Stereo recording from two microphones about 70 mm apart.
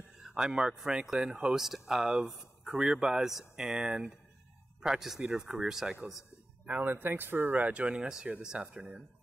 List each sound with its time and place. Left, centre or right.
0.3 s speech: centre
6.6 s speech: right
7.7 s speech: centre